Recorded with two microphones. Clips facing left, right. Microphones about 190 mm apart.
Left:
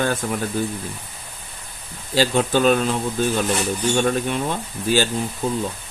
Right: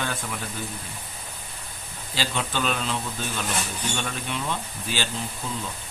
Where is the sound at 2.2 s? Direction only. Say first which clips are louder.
Left 10 dB; 45° left (ahead or behind).